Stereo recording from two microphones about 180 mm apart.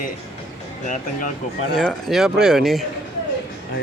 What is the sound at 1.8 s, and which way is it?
Speech, centre (ahead or behind).